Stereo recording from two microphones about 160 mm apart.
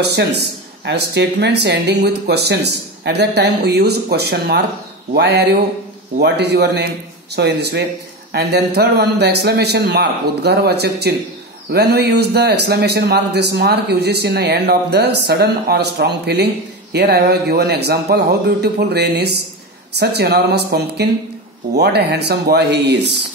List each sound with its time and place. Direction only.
0.0 s speech: 90° right